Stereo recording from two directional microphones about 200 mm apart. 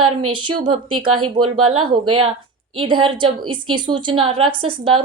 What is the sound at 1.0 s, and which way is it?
Speech, 90° right.